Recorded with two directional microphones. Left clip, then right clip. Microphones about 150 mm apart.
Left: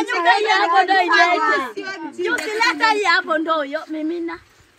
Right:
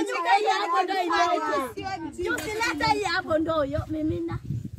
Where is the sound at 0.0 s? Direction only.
55° right (ahead or behind).